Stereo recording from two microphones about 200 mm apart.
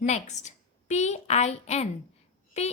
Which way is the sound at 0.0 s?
35° left (ahead or behind).